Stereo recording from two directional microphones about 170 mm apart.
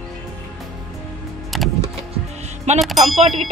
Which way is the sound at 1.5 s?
Centre (ahead or behind).